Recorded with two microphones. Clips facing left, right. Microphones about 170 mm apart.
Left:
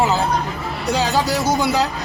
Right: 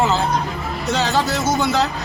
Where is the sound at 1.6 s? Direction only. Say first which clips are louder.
Even; 10° left (ahead or behind).